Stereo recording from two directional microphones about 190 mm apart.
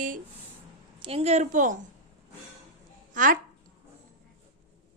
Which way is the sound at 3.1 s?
45° right (ahead or behind).